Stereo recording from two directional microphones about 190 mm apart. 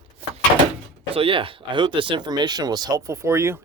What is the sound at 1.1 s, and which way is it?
Speech, 30° right (ahead or behind).